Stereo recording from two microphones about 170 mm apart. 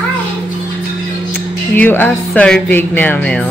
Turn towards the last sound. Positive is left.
turn(degrees=10)  # may be behind; listen again after turning